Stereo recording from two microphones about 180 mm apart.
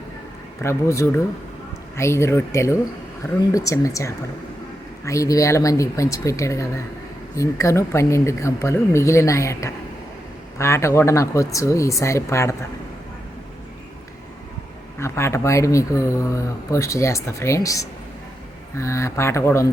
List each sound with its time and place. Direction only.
0.6 s speech: 15° left (ahead or behind)
14.9 s speech: 15° left (ahead or behind)